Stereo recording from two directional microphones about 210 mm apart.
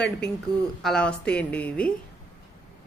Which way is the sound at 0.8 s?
5° left (ahead or behind).